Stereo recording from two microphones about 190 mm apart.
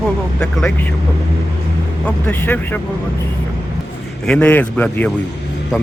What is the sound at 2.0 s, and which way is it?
Speech, 10° left (ahead or behind).